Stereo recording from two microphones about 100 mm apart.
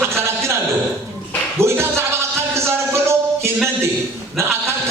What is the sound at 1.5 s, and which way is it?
Music, 25° right (ahead or behind).